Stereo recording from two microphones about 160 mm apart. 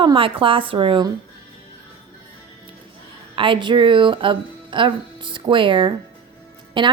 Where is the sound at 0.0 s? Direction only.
30° right (ahead or behind).